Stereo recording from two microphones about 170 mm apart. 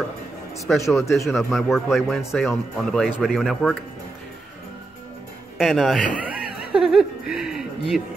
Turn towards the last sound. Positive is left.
turn(degrees=-5)  # may be behind; listen again after turning